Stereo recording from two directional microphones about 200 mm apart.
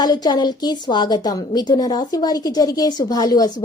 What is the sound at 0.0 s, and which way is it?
A woman's voice, 20° left (ahead or behind).